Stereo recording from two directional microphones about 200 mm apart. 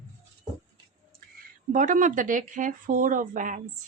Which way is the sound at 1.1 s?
45° right (ahead or behind).